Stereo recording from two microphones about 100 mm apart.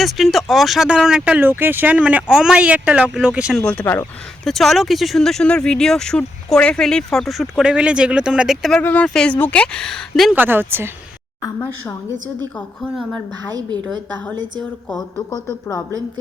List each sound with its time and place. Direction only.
0.0 s speech: centre (ahead or behind)
3.6 s speech: 15° left (ahead or behind)
4.4 s speech: centre (ahead or behind)
8.8 s speech: 15° left (ahead or behind)
10.3 s speech: 20° right (ahead or behind)
11.4 s speech: 25° left (ahead or behind)
12.5 s speech: 5° left (ahead or behind)
13.5 s a woman's voice: 40° right (ahead or behind)